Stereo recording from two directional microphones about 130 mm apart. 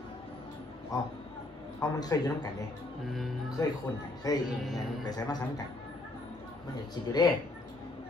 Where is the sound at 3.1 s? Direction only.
Centre (ahead or behind).